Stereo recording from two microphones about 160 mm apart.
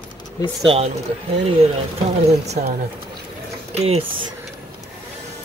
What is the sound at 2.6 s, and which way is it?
Speech, 55° right (ahead or behind).